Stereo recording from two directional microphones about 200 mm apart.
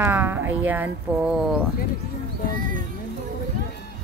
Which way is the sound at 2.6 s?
45° right (ahead or behind).